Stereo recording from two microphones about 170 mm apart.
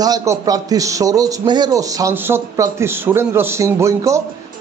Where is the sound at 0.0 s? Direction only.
20° right (ahead or behind).